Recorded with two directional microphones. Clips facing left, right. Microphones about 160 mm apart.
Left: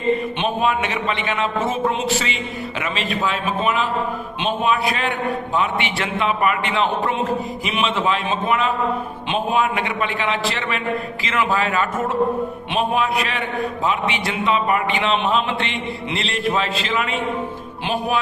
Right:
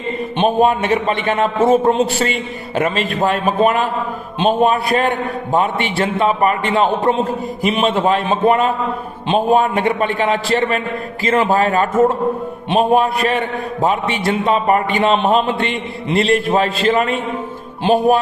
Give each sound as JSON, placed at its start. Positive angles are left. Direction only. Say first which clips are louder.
{"t": 0.3, "sound": "a man's voice", "louder": "right 6 dB", "side_deg": -45}
{"t": 17.8, "sound": "music", "louder": "right 9 dB", "side_deg": -35}